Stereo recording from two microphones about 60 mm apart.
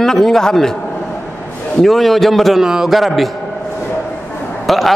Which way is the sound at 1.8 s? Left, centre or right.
Centre.